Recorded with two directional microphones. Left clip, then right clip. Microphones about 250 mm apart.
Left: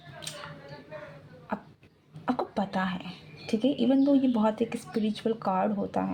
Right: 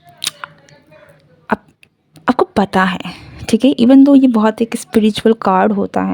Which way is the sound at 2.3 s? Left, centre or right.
Right.